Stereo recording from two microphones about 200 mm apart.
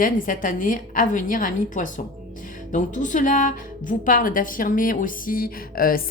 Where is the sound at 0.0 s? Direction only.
45° left (ahead or behind).